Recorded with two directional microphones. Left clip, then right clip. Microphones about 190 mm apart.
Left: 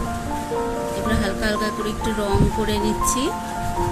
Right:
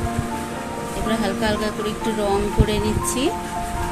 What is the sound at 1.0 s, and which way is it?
Speech, 30° left (ahead or behind).